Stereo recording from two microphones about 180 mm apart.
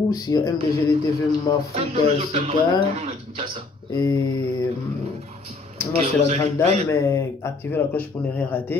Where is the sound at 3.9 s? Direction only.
20° left (ahead or behind).